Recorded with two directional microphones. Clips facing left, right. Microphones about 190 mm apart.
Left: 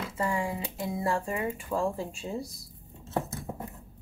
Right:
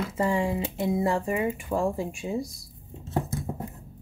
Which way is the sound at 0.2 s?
25° right (ahead or behind).